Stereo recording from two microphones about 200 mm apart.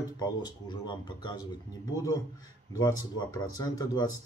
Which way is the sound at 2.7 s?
15° left (ahead or behind).